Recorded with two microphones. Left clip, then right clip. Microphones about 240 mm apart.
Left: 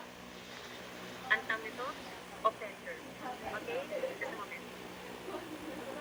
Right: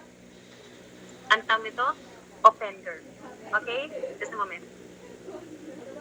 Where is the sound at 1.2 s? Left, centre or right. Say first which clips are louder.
Right 10 dB; right.